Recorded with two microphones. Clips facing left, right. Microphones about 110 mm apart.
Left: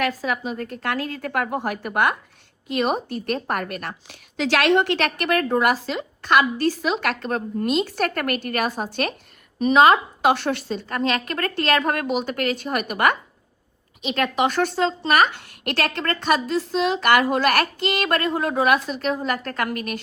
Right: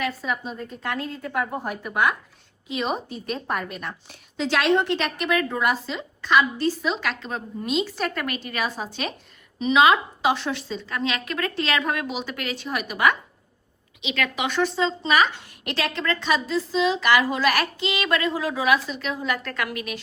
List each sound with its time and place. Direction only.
0.0 s a woman's voice: 85° left; by 9.1 s 60° left (ahead or behind)
9.6 s a woman's voice: 50° left (ahead or behind)
10.2 s a woman's voice: 65° left (ahead or behind)
14.0 s speech: 40° left (ahead or behind)
14.5 s a woman's voice: 60° left (ahead or behind)